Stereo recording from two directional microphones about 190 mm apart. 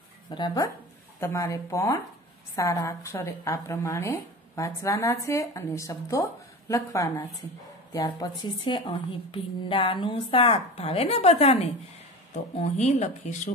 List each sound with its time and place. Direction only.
0.3 s a woman's voice: 25° left (ahead or behind)
12.7 s speech: 35° left (ahead or behind)